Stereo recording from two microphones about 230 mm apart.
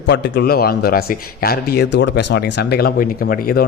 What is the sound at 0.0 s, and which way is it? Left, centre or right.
A man's voice, left.